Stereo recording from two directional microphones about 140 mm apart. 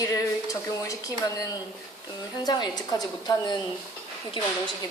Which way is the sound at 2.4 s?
30° left (ahead or behind).